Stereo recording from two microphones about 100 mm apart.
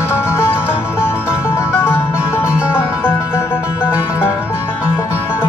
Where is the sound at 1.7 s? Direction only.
25° left (ahead or behind).